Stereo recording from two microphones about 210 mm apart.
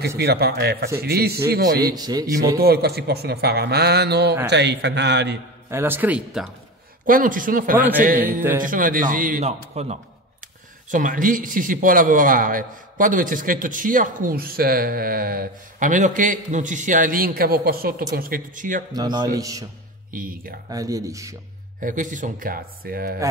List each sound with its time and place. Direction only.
0.2 s a man's voice: 50° right (ahead or behind)
2.0 s speech: 20° right (ahead or behind)
2.6 s a man's voice: 50° right (ahead or behind)
5.7 s speech: 10° right (ahead or behind)
7.1 s speech: 40° right (ahead or behind)
18.9 s speech: 20° right (ahead or behind)
20.1 s speech: 40° right (ahead or behind)
20.7 s speech: 15° right (ahead or behind)
21.7 s speech: 40° right (ahead or behind)